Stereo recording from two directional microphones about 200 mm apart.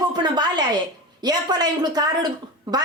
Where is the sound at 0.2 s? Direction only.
20° right (ahead or behind).